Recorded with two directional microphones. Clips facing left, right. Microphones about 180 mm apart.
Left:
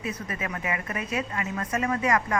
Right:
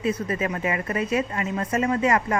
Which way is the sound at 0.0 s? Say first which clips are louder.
Right 8 dB; 30° right (ahead or behind).